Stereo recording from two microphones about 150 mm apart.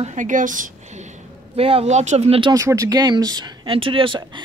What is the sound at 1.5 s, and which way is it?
Speech, 40° right (ahead or behind).